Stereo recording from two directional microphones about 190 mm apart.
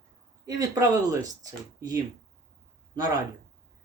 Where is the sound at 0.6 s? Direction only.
20° right (ahead or behind).